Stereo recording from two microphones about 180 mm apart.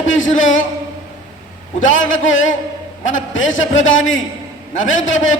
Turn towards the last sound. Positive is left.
turn(degrees=90)